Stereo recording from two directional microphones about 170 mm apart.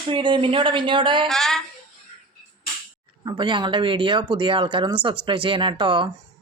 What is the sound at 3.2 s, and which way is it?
Speech, 25° right (ahead or behind).